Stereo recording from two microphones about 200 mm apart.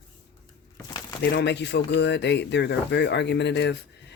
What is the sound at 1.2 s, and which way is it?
Speech, 55° left (ahead or behind).